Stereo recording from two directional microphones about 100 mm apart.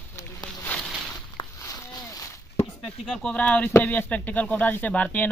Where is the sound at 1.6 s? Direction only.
25° left (ahead or behind).